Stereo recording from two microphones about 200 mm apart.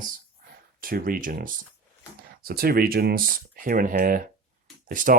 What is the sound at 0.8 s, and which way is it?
Speech, 45° right (ahead or behind).